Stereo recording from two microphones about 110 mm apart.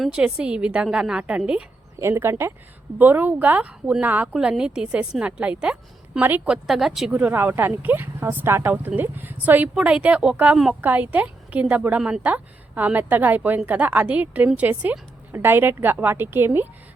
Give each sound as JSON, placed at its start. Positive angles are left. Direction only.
{"t": 0.0, "sound": "a woman's voice", "side_deg": -10}
{"t": 2.0, "sound": "a woman's voice", "side_deg": -20}